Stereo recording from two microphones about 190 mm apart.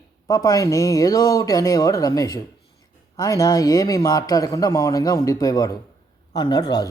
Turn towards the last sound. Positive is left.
turn(degrees=20)  # may be behind; listen again after turning